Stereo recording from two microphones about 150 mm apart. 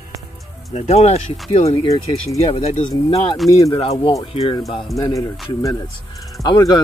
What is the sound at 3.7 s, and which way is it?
Speech, 40° left (ahead or behind).